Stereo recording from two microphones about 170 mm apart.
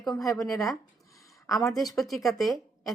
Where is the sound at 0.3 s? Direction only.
20° left (ahead or behind).